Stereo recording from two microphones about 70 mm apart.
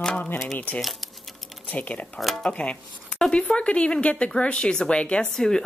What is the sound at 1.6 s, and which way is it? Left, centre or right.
Speech, centre.